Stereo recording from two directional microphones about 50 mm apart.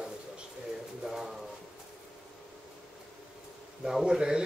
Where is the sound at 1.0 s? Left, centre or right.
Centre.